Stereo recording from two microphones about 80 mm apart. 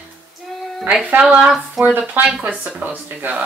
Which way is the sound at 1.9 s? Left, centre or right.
Right.